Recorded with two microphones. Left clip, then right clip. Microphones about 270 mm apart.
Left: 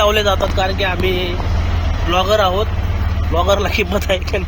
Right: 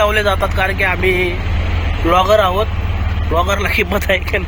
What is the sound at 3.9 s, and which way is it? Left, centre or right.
Speech, centre.